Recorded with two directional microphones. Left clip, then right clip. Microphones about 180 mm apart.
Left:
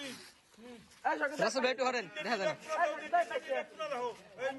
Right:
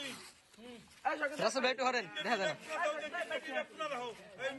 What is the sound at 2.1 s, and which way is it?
Speech, 35° left (ahead or behind).